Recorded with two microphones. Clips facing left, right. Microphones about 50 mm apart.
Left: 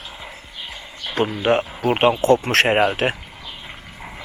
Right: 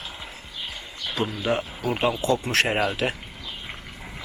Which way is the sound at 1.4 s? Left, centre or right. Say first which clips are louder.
Left 8 dB; left.